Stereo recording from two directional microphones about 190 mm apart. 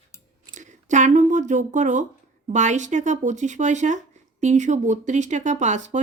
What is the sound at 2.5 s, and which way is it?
Speech, 40° right (ahead or behind).